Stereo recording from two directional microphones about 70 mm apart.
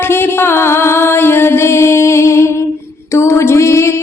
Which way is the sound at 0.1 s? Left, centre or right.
Left.